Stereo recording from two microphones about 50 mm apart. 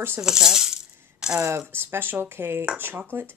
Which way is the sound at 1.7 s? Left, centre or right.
Right.